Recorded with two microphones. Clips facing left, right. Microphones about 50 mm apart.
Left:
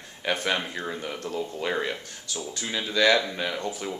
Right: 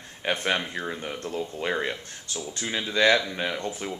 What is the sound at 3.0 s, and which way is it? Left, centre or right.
Speech, right.